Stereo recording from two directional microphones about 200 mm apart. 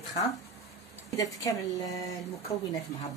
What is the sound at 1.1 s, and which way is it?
Speech, 15° left (ahead or behind).